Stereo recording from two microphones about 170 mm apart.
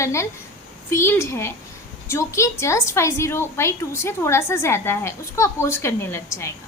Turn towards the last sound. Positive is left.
turn(degrees=15)  # may be behind; listen again after turning